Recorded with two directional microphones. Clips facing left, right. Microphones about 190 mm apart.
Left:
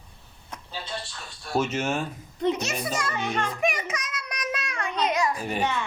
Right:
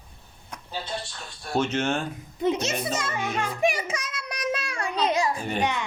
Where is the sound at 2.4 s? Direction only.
5° right (ahead or behind).